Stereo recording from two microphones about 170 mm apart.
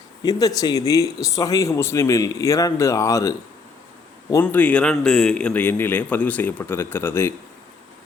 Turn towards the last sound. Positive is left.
turn(degrees=15)  # may be behind; listen again after turning